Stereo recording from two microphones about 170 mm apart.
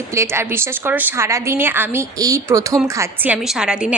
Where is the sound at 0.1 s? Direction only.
15° right (ahead or behind).